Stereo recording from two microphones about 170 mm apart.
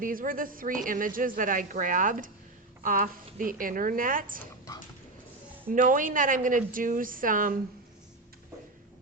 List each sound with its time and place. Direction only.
0.0 s a woman's voice: 55° right (ahead or behind)
5.7 s a woman's voice: 50° right (ahead or behind)